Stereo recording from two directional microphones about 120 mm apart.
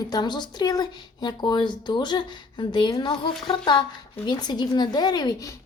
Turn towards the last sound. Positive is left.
turn(degrees=30)  # may be behind; listen again after turning